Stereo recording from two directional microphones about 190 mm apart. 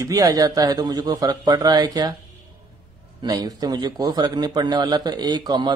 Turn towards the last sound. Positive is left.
turn(degrees=-20)  # may be behind; listen again after turning